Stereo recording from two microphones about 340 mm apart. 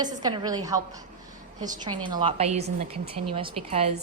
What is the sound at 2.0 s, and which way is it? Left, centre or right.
A woman's voice, centre.